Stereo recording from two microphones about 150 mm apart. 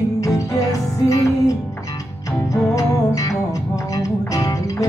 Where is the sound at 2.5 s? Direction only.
20° left (ahead or behind).